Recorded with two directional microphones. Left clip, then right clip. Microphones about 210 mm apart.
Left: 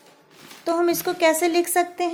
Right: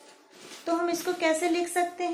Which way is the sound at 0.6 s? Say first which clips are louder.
Left 6 dB; 45° left (ahead or behind).